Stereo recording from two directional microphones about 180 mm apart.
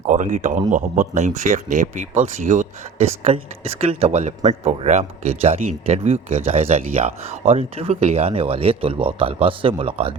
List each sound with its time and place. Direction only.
0.0 s a man's voice: 45° right (ahead or behind)